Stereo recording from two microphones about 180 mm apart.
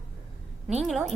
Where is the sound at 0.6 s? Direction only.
5° right (ahead or behind).